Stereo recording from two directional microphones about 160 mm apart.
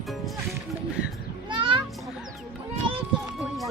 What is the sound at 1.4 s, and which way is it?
Children playing, 30° right (ahead or behind).